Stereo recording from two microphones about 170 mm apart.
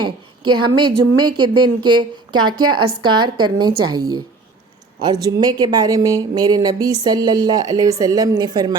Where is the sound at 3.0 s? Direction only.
25° right (ahead or behind).